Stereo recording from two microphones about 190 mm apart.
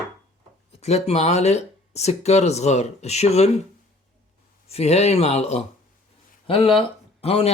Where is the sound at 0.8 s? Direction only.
35° left (ahead or behind).